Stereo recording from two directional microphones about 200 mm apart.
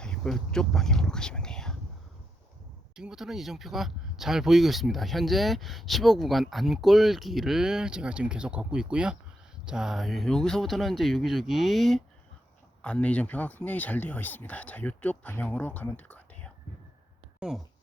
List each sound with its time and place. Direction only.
0.0 s speech: 5° left (ahead or behind)
2.9 s speech: 5° right (ahead or behind)